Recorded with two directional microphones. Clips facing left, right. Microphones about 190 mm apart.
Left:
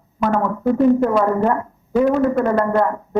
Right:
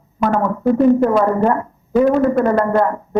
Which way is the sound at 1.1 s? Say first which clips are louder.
Right 2 dB; 45° right (ahead or behind).